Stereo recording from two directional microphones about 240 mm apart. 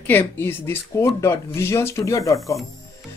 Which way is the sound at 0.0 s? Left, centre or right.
Centre.